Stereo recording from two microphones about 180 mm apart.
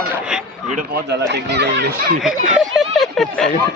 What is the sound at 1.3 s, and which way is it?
Speech, 70° right (ahead or behind).